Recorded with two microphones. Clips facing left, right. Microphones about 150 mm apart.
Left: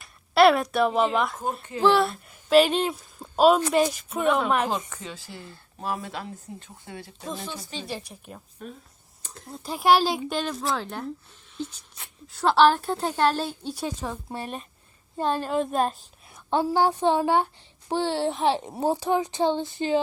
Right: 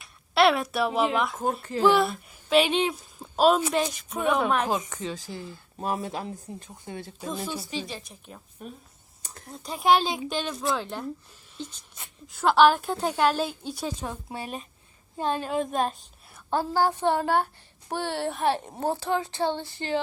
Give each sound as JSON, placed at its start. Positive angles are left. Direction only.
{"t": 0.0, "sound": "speech", "side_deg": 0}
{"t": 4.2, "sound": "a woman's voice", "side_deg": -10}
{"t": 5.1, "sound": "speech", "side_deg": -40}
{"t": 5.4, "sound": "speech", "side_deg": -15}
{"t": 7.2, "sound": "speech", "side_deg": 0}
{"t": 7.9, "sound": "a woman's voice", "side_deg": 10}
{"t": 8.6, "sound": "a woman's voice", "side_deg": -10}
{"t": 9.5, "sound": "a woman's voice", "side_deg": 5}
{"t": 13.7, "sound": "speech", "side_deg": 5}
{"t": 16.6, "sound": "a woman's voice", "side_deg": 10}